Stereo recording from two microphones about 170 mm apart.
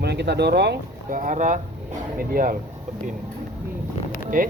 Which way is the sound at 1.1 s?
50° right (ahead or behind).